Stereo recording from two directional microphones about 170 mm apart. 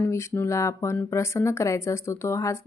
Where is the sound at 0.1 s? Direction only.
15° left (ahead or behind).